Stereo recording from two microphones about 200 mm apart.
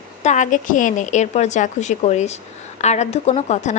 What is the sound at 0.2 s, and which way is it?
A woman's voice, 35° left (ahead or behind).